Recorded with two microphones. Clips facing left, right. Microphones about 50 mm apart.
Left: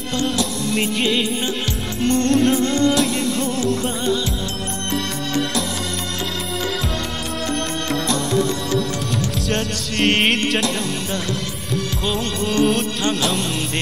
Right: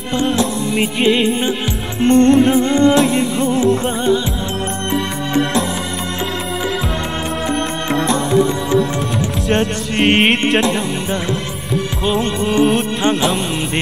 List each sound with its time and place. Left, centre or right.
0.1 s music: right
7.9 s music: right
11.7 s music: centre